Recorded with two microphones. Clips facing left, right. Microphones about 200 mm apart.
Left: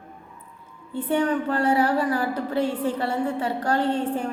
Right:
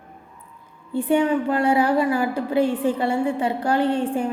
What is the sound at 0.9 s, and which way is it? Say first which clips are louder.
A woman's voice: right 4 dB; 10° right (ahead or behind).